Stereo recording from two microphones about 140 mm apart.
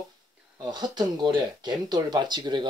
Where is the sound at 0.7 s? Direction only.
30° right (ahead or behind).